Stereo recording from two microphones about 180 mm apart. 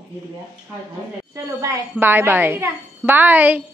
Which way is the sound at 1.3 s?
15° right (ahead or behind).